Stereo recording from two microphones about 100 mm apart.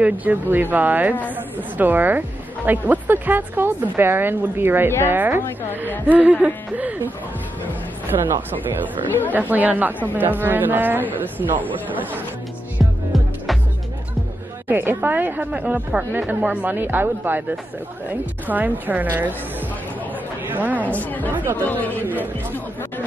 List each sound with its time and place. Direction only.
0.0 s speech: 15° right (ahead or behind)
8.1 s speech: 40° right (ahead or behind)
9.3 s speech: 15° right (ahead or behind)
13.1 s music: centre (ahead or behind)
14.7 s speech: 20° right (ahead or behind)
20.4 s a woman's voice: 15° right (ahead or behind)
20.8 s speech: 15° left (ahead or behind)
22.0 s speech: 20° right (ahead or behind)